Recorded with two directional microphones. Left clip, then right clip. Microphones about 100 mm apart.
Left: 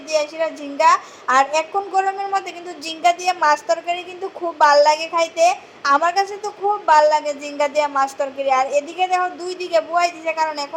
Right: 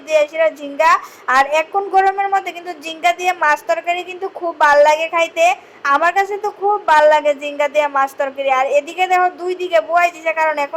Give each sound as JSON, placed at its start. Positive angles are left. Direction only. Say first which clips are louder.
{"t": 0.1, "sound": "a woman's voice", "louder": "right 6 dB", "side_deg": -20}